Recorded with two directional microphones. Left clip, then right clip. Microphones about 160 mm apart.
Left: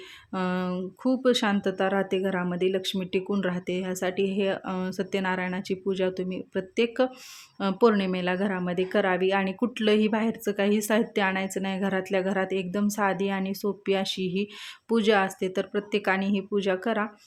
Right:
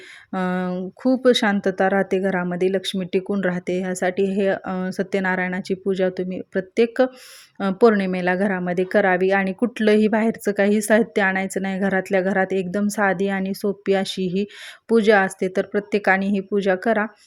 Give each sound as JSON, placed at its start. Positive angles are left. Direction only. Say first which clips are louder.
{"t": 0.3, "sound": "a woman's voice", "louder": "right 5 dB", "side_deg": -30}